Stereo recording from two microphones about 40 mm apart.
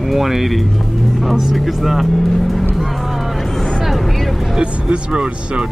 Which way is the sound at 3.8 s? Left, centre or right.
Centre.